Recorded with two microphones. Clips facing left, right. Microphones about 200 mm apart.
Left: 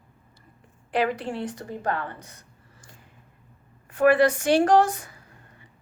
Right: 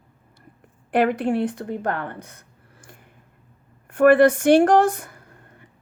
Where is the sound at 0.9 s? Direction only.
55° right (ahead or behind).